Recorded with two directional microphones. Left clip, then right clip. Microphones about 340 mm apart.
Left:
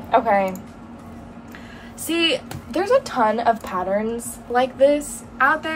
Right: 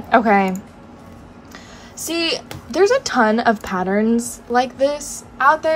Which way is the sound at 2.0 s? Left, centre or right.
Centre.